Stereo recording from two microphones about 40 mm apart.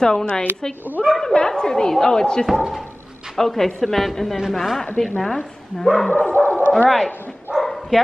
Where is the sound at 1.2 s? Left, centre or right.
Centre.